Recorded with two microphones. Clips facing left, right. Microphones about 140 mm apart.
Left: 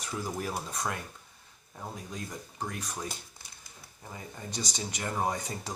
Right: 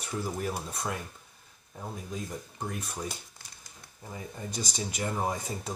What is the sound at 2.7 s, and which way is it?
Speech, centre (ahead or behind).